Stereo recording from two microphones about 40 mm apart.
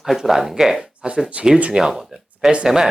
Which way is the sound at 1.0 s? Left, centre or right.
Centre.